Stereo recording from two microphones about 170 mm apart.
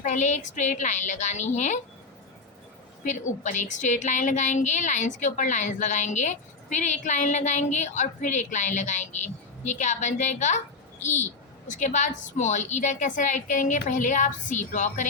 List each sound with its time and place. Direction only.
0.0 s a woman's voice: 45° left (ahead or behind)
3.0 s a child's voice: 45° left (ahead or behind)